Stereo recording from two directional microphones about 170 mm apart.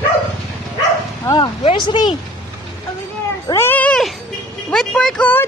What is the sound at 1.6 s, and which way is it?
Speech, 30° left (ahead or behind).